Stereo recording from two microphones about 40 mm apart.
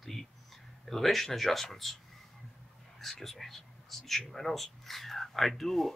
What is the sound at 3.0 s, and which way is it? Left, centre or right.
Speech, centre.